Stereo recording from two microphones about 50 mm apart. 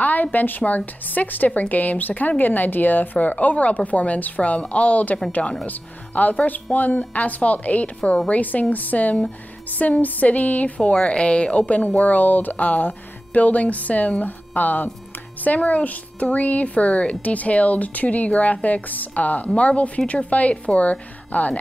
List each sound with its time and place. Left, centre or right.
0.0 s a woman's voice: left
5.7 s a woman's voice: left
10.8 s a woman's voice: centre